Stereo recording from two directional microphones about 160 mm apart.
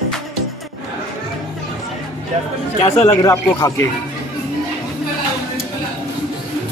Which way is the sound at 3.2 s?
20° left (ahead or behind).